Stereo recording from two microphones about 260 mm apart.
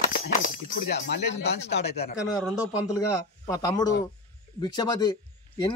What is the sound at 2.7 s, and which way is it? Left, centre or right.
Speech, centre.